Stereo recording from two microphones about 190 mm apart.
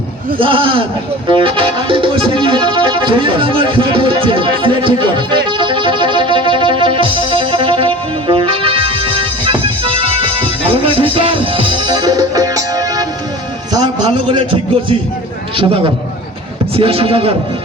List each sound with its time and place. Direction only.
0.3 s speech: 25° right (ahead or behind)
1.3 s music: 25° right (ahead or behind)
13.7 s a man's voice: 25° right (ahead or behind)